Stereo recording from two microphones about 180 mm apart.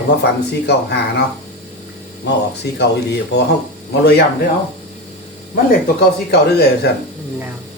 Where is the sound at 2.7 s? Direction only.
65° left (ahead or behind).